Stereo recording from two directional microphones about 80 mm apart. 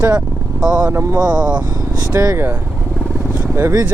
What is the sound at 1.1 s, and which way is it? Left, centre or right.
Speech, right.